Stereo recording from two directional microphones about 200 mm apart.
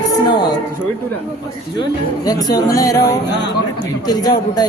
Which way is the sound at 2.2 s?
20° left (ahead or behind).